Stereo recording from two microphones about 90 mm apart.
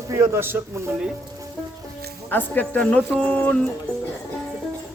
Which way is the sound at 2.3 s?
20° left (ahead or behind).